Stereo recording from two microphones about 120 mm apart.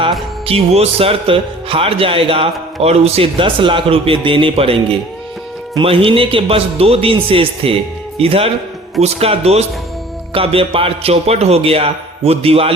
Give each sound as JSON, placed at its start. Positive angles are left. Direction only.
{"t": 0.4, "sound": "a man's voice", "side_deg": -55}
{"t": 10.3, "sound": "a man's voice", "side_deg": -50}